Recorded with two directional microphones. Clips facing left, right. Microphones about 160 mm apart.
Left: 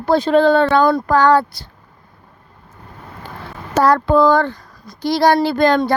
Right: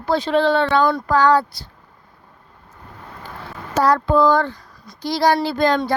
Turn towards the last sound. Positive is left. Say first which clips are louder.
# left 4 dB
turn(degrees=60)  # may be behind; listen again after turning